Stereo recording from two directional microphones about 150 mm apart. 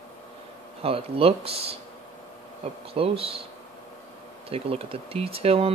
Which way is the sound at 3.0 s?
40° right (ahead or behind).